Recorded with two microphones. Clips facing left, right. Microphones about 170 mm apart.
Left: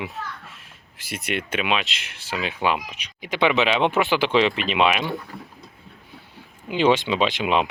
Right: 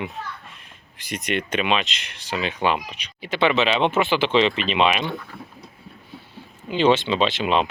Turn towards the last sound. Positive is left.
turn(degrees=15)  # may be behind; listen again after turning